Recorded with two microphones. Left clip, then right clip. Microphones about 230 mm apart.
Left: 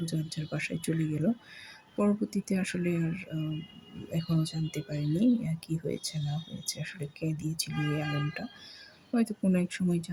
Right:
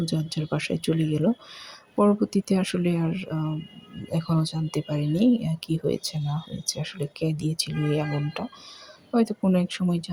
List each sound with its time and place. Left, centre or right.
0.0 s speech: centre